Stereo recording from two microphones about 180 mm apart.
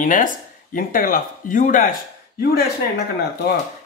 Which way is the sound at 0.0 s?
45° left (ahead or behind).